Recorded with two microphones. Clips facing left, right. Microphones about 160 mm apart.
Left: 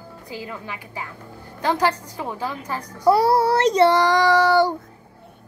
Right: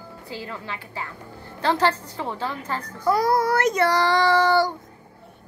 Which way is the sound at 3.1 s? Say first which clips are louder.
Left 3 dB; 30° left (ahead or behind).